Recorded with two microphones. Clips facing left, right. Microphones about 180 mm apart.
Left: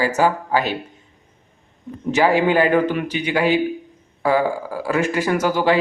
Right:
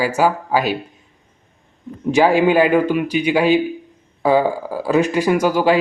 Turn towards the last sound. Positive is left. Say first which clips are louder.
# right 3 dB
turn(degrees=-15)  # may be behind; listen again after turning